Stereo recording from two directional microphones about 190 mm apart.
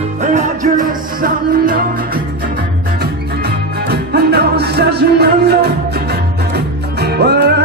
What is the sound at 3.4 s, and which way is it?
Music, 55° right (ahead or behind).